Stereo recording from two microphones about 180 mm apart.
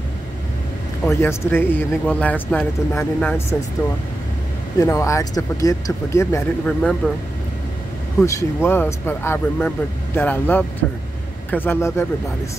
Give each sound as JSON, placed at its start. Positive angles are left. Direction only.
{"t": 1.0, "sound": "speech", "side_deg": 10}
{"t": 4.7, "sound": "speech", "side_deg": 15}
{"t": 8.2, "sound": "speech", "side_deg": 15}
{"t": 11.5, "sound": "speech", "side_deg": 10}